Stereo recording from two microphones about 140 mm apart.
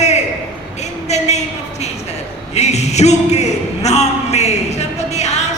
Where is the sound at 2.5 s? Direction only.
50° left (ahead or behind).